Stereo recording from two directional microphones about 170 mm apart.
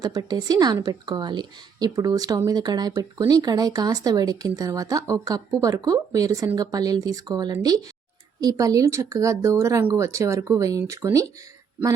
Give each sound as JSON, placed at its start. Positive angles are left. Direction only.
{"t": 0.0, "sound": "a woman's voice", "side_deg": -25}